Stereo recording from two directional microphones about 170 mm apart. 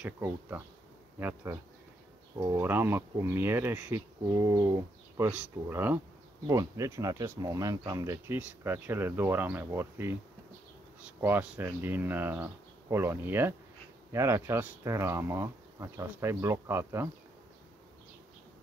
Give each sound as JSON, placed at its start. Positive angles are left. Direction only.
{"t": 0.0, "sound": "speech", "side_deg": -10}